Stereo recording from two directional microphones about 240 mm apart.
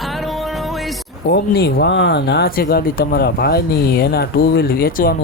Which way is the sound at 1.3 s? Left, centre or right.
Left.